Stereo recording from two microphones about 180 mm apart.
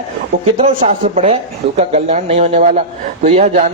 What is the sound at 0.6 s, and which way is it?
A man's voice, 40° right (ahead or behind).